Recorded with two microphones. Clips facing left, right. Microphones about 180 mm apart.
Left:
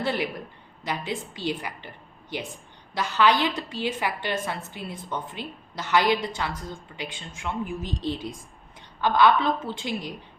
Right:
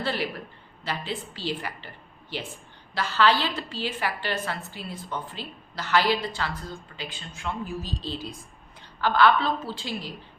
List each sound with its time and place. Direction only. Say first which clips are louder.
0.0 s a woman's voice: left 2 dB; 20° left (ahead or behind)
2.9 s a woman's voice: left 1 dB; 20° left (ahead or behind)